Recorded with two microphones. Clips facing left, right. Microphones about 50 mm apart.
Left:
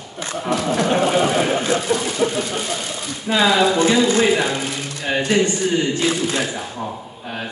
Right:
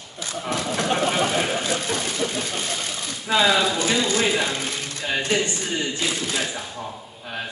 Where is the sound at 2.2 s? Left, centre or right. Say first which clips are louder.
Left 8 dB; left.